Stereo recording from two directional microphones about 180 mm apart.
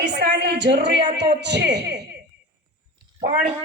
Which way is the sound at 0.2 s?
70° right (ahead or behind).